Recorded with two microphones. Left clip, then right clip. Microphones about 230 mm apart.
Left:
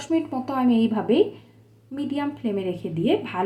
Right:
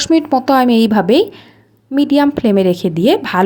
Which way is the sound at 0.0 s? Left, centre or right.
Right.